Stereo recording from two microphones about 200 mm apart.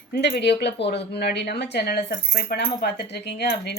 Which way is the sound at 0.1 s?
55° left (ahead or behind).